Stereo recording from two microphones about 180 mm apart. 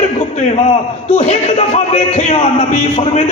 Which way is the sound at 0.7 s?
35° left (ahead or behind).